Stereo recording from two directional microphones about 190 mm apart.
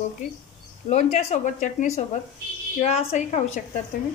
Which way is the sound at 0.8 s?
35° left (ahead or behind).